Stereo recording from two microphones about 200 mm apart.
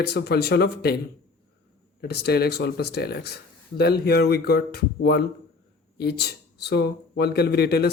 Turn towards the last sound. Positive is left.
turn(degrees=55)  # may be behind; listen again after turning